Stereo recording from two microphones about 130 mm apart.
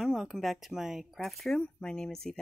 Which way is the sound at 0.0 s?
Centre (ahead or behind).